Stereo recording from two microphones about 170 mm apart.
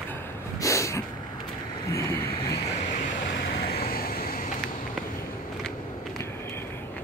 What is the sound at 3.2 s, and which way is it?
Vehicle, 65° left (ahead or behind).